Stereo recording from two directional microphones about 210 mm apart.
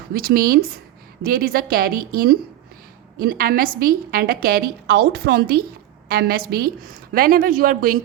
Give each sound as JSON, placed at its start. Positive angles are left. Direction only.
{"t": 0.1, "sound": "a woman's voice", "side_deg": -45}